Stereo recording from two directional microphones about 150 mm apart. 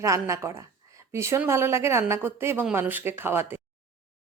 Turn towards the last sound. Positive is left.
turn(degrees=-15)  # may be behind; listen again after turning